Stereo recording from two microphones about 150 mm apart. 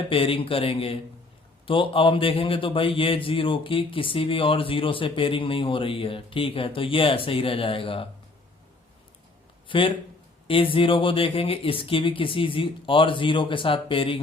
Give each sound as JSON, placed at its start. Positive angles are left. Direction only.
{"t": 0.1, "sound": "a man's voice", "side_deg": 35}
{"t": 9.6, "sound": "a man's voice", "side_deg": 35}